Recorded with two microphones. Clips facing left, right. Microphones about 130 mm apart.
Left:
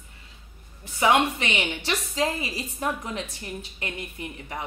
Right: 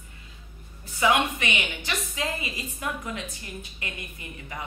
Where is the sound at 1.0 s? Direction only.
30° left (ahead or behind).